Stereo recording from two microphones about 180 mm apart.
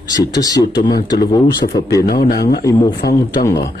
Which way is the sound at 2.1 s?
55° left (ahead or behind).